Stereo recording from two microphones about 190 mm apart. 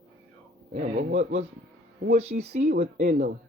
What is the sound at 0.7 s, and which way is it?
A man's voice, 35° right (ahead or behind).